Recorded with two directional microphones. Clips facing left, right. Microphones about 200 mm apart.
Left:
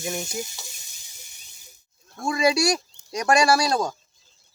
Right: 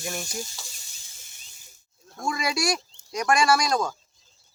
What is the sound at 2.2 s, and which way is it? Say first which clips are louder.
Speech: left 6 dB; 30° left (ahead or behind).